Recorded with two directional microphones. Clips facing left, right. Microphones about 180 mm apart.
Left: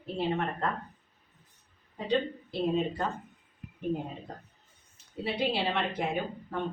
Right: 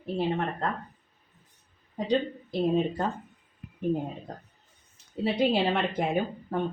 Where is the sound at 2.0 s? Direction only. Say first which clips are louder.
Right 2 dB; 40° right (ahead or behind).